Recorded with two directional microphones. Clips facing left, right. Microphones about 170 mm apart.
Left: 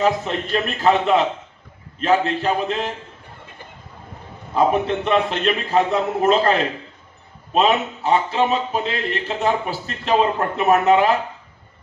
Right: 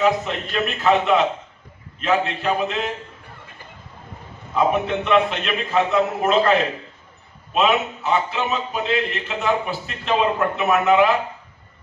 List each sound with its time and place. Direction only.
0.0 s a man's voice: 35° left (ahead or behind)
4.6 s a man's voice: 35° left (ahead or behind)
7.5 s a man's voice: 35° left (ahead or behind)